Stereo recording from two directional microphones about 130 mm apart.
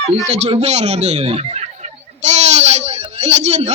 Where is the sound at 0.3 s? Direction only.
55° right (ahead or behind).